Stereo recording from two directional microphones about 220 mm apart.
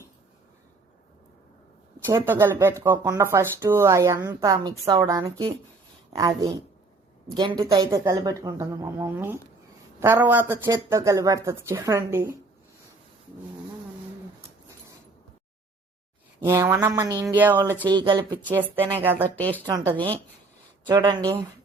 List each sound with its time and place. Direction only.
2.0 s speech: 10° right (ahead or behind)
16.4 s speech: 10° right (ahead or behind)
17.9 s speech: 20° right (ahead or behind)
18.8 s speech: 10° right (ahead or behind)
19.6 s speech: 20° right (ahead or behind)